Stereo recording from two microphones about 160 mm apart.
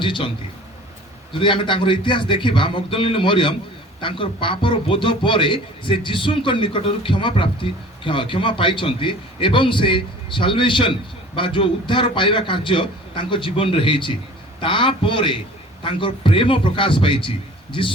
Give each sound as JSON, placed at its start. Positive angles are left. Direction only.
{"t": 0.0, "sound": "a man's voice", "side_deg": 30}
{"t": 1.3, "sound": "a man's voice", "side_deg": 30}